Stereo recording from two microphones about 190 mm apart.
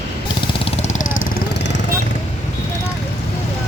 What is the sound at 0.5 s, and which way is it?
Vehicle, 30° left (ahead or behind).